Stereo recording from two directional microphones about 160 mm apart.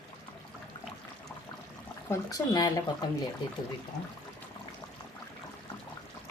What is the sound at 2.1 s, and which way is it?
Speech, 25° left (ahead or behind).